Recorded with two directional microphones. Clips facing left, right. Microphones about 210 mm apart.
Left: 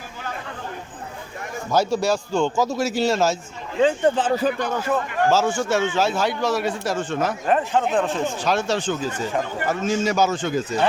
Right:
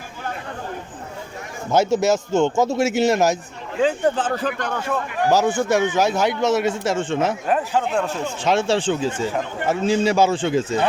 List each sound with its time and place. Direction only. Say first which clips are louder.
1.7 s speech: right 3 dB; 20° right (ahead or behind)
3.8 s speech: left 1 dB; centre (ahead or behind)
5.1 s speech: right 3 dB; 15° right (ahead or behind)
7.4 s speech: left 1 dB; centre (ahead or behind)
8.4 s speech: right 7 dB; 25° right (ahead or behind)